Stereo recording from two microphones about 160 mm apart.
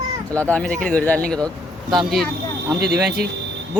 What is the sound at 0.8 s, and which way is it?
Speech, 10° left (ahead or behind).